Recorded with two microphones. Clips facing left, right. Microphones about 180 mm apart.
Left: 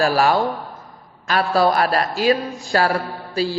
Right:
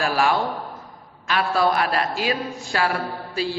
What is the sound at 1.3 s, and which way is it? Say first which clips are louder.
A man's voice: left 3 dB; 40° left (ahead or behind).